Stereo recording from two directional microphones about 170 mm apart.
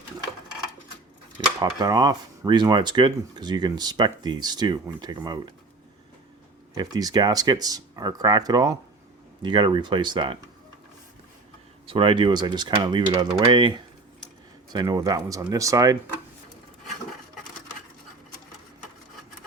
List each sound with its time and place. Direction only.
1.5 s speech: 20° right (ahead or behind)
6.7 s speech: 25° right (ahead or behind)
11.9 s speech: 30° right (ahead or behind)